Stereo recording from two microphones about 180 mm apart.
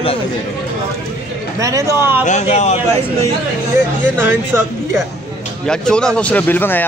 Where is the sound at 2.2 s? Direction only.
40° left (ahead or behind).